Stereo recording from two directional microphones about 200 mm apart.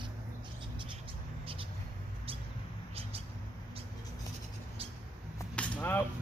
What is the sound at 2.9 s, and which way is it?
Vehicle, 30° right (ahead or behind).